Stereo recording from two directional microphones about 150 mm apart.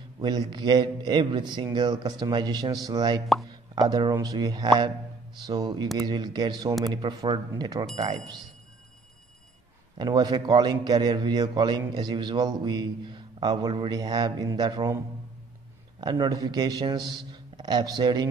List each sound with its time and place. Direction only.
0.2 s a man's voice: 30° right (ahead or behind)
7.9 s speech: 45° right (ahead or behind)
9.9 s a man's voice: 30° right (ahead or behind)
16.0 s a man's voice: 30° right (ahead or behind)